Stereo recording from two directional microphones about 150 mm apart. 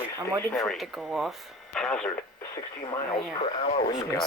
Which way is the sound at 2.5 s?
30° left (ahead or behind).